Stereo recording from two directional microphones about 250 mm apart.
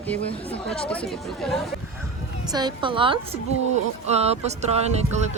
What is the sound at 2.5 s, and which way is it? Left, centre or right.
A woman's voice, centre.